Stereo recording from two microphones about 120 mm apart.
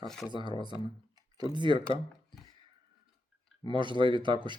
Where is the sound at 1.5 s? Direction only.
40° right (ahead or behind).